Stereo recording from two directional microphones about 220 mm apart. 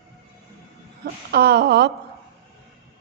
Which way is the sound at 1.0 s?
45° right (ahead or behind).